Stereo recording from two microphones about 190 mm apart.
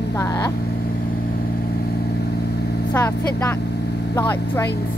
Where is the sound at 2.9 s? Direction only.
15° left (ahead or behind).